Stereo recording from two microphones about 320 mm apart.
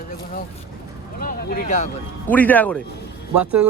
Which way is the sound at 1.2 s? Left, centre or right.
Left.